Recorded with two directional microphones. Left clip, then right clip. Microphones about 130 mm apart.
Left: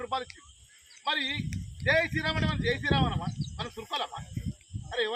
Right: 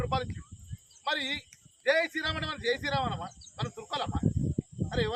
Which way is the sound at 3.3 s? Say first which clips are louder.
Left 2 dB; 10° right (ahead or behind).